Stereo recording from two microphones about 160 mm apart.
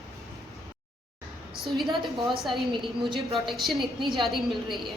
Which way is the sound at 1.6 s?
Centre (ahead or behind).